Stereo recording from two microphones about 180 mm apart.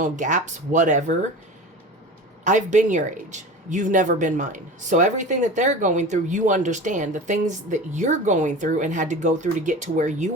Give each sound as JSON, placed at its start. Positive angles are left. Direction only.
{"t": 0.0, "sound": "speech", "side_deg": -45}
{"t": 2.4, "sound": "speech", "side_deg": -45}